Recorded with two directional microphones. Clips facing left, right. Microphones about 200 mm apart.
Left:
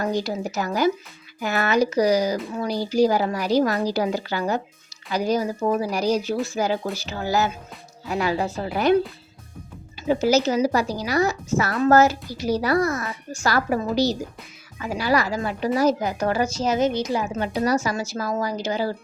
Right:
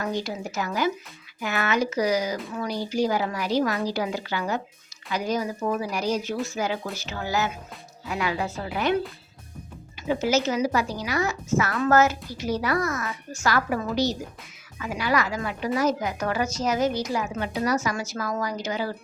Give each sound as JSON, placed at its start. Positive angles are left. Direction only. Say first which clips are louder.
{"t": 0.0, "sound": "a woman's voice", "louder": "left 4 dB", "side_deg": 35}
{"t": 10.1, "sound": "a woman's voice", "louder": "left 4 dB", "side_deg": 35}